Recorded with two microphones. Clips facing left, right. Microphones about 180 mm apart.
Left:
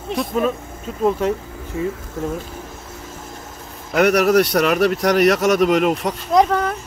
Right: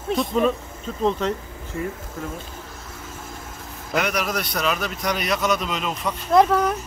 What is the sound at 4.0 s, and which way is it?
A man's voice, 65° left (ahead or behind).